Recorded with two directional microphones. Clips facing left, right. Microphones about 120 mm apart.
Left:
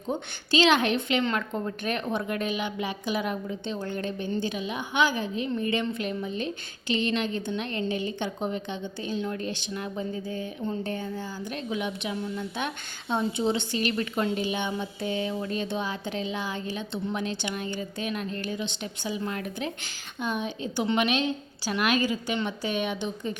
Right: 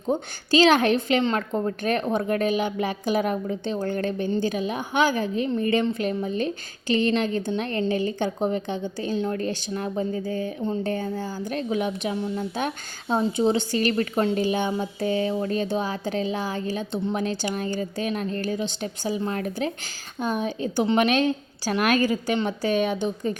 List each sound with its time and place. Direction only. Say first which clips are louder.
0.1 s a woman's voice: right 5 dB; 40° right (ahead or behind)